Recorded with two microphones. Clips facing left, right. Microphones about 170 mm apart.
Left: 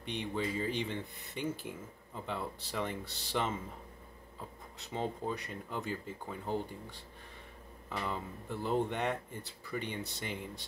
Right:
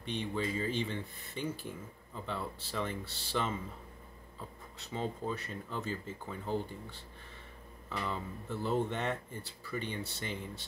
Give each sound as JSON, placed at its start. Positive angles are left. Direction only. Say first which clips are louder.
{"t": 0.1, "sound": "speech", "louder": "right 1 dB", "side_deg": 15}